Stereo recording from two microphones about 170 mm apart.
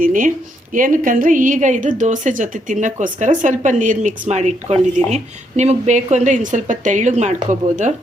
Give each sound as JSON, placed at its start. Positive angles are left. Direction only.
{"t": 0.0, "sound": "a woman's voice", "side_deg": -50}